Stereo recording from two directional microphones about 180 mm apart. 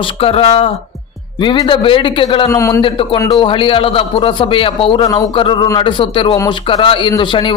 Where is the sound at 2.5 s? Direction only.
15° left (ahead or behind).